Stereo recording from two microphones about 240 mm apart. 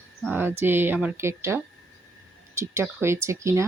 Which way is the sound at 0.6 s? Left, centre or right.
Centre.